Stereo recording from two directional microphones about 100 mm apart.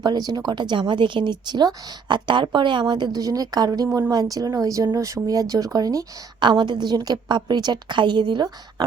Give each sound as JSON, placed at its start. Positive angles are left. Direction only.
{"t": 0.0, "sound": "a woman's voice", "side_deg": -45}
{"t": 6.4, "sound": "a woman's voice", "side_deg": -50}